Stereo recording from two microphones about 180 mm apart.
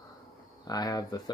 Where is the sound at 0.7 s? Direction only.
20° left (ahead or behind).